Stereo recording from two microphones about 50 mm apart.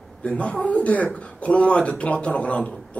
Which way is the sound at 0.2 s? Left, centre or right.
Left.